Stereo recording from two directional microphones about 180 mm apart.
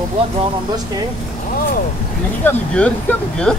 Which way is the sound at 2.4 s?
10° left (ahead or behind).